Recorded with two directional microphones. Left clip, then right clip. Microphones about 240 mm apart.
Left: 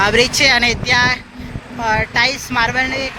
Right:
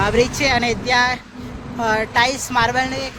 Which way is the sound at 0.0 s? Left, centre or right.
Centre.